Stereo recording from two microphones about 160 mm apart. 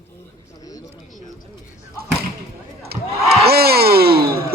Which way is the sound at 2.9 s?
80° right.